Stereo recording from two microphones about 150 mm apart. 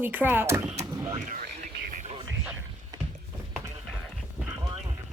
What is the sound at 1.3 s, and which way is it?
Whispering, 75° right (ahead or behind).